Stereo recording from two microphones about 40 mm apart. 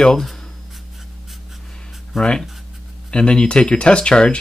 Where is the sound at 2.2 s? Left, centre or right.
Centre.